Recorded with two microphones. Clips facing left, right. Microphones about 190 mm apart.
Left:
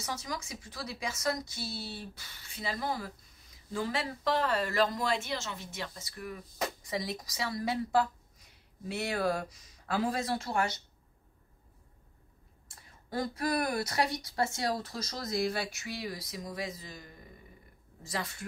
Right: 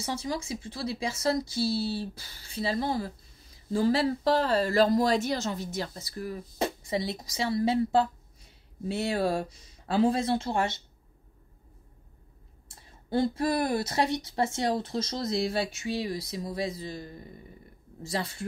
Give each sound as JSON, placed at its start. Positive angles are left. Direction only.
{"t": 0.0, "sound": "speech", "side_deg": -30}
{"t": 12.7, "sound": "speech", "side_deg": -25}